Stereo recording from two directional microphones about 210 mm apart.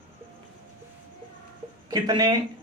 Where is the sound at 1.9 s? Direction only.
20° right (ahead or behind).